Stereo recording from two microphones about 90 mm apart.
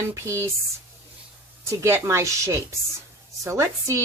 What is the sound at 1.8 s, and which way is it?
Speech, 30° right (ahead or behind).